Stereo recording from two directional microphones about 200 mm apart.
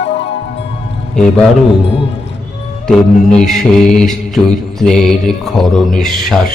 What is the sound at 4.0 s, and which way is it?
Mantra, centre (ahead or behind).